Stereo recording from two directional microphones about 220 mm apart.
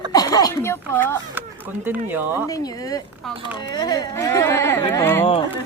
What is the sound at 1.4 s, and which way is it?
Speech, 10° right (ahead or behind).